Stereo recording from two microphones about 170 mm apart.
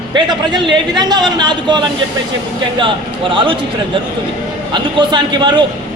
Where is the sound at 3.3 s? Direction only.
30° right (ahead or behind).